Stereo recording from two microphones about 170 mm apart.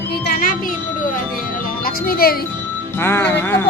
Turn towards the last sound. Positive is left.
turn(degrees=10)  # may be behind; listen again after turning